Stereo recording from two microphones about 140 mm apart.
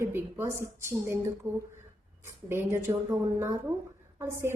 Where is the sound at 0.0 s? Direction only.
15° right (ahead or behind).